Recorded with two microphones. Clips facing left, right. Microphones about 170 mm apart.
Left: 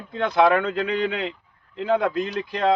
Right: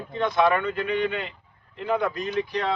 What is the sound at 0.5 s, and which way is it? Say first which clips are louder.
Speech: left 2 dB; 90° left.